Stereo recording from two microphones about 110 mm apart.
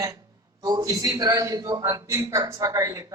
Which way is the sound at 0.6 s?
35° right (ahead or behind).